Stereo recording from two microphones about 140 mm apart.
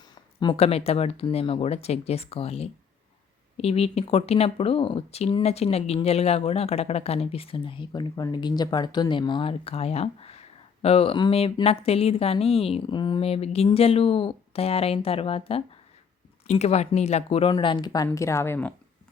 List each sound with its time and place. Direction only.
0.3 s speech: 40° left (ahead or behind)
13.2 s speech: 45° left (ahead or behind); by 18.7 s 15° left (ahead or behind)